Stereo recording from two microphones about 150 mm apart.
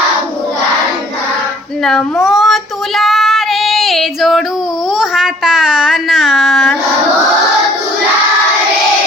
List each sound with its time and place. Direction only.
1.8 s child singing: centre (ahead or behind)